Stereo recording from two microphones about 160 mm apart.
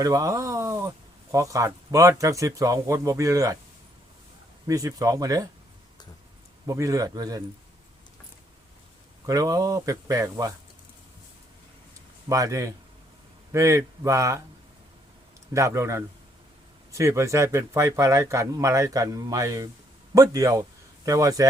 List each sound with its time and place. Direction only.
0.0 s speech: 20° right (ahead or behind)
4.6 s speech: 20° right (ahead or behind)
6.7 s speech: 20° right (ahead or behind)
9.2 s speech: 20° right (ahead or behind)
12.3 s speech: 20° right (ahead or behind)
15.5 s a man's voice: 20° right (ahead or behind)